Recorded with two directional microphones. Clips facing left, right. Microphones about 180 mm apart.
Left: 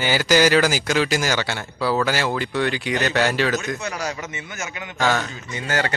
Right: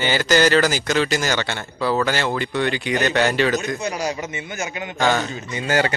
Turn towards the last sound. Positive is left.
turn(degrees=-15)  # may be behind; listen again after turning